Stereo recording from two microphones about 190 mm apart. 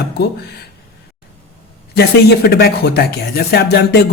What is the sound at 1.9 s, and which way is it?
Speech, 55° left (ahead or behind).